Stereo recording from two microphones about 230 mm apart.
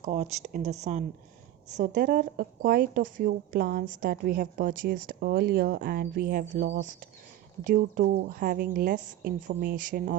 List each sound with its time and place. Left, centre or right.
0.0 s speech: right
7.7 s speech: right